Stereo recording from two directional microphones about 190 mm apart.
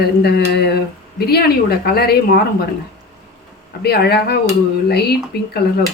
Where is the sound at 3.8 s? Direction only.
55° left (ahead or behind).